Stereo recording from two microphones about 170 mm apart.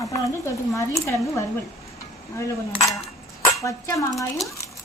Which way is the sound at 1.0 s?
20° left (ahead or behind).